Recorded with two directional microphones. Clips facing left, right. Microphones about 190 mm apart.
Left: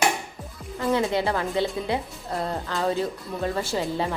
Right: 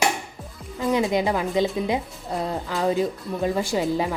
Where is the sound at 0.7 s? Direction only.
15° right (ahead or behind).